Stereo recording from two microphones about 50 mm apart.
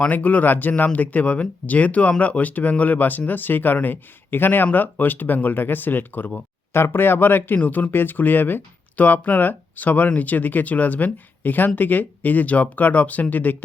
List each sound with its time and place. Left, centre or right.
0.0 s speech: left